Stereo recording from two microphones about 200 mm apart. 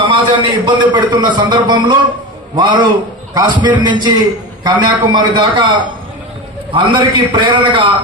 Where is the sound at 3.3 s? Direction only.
20° right (ahead or behind).